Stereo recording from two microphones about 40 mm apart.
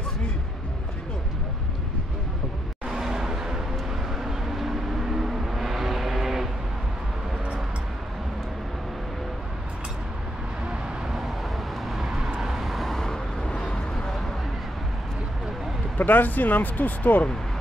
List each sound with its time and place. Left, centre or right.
2.9 s vehicle: centre
11.9 s vehicle: centre
16.0 s speech: left